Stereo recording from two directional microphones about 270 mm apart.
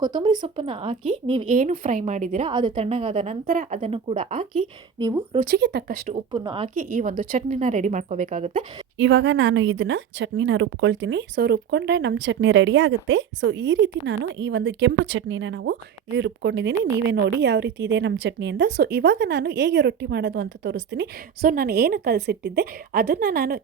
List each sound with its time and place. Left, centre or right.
0.0 s speech: centre
1.5 s a woman's voice: right
2.5 s a woman's voice: centre
4.9 s speech: centre
5.4 s a woman's voice: right
6.1 s a woman's voice: centre
6.7 s a woman's voice: right
9.0 s a woman's voice: right